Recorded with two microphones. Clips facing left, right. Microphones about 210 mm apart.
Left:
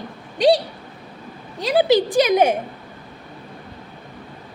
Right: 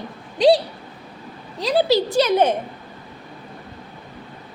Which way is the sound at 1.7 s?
15° left (ahead or behind).